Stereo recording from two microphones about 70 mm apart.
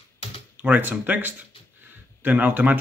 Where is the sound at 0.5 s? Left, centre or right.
Right.